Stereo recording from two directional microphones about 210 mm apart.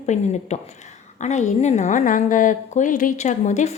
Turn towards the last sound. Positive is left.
turn(degrees=35)  # may be behind; listen again after turning